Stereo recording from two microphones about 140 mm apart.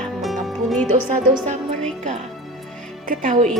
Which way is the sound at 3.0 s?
75° right (ahead or behind).